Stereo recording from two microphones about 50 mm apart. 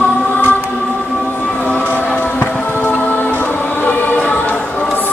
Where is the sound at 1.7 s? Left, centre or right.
Left.